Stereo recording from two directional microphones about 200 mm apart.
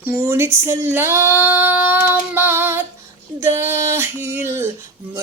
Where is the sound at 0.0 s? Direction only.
10° right (ahead or behind).